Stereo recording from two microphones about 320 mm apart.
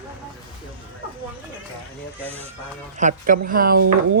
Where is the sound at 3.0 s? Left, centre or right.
Right.